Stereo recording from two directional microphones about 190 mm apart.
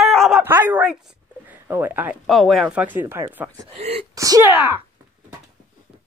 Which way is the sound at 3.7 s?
30° right (ahead or behind).